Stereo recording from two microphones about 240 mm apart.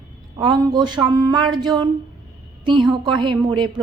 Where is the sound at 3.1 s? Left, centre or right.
Centre.